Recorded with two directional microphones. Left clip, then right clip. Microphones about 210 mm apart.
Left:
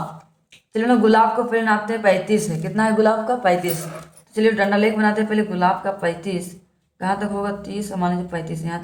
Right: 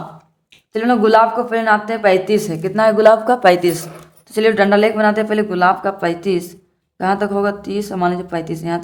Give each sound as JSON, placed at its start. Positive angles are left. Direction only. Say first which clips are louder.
{"t": 0.7, "sound": "speech", "louder": "right 4 dB", "side_deg": -35}